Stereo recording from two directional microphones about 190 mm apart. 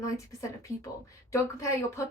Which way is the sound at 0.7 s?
40° left (ahead or behind).